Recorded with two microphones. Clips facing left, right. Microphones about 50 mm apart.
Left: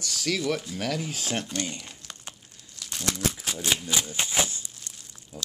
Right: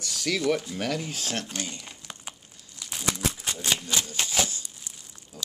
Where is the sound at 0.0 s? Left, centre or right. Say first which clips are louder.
Right 1 dB; centre.